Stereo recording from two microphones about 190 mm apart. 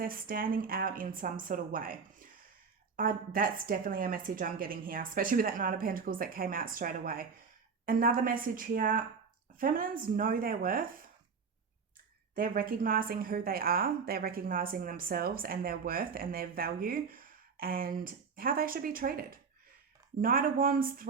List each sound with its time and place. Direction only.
0.0 s a woman's voice: 50° right (ahead or behind)
12.3 s a woman's voice: 50° right (ahead or behind)